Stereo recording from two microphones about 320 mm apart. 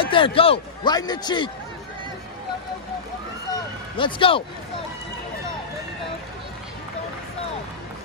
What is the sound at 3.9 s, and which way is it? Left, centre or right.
Speech, centre.